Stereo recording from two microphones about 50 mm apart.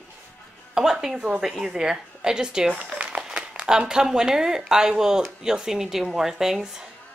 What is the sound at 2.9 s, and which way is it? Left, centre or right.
Crumpling, right.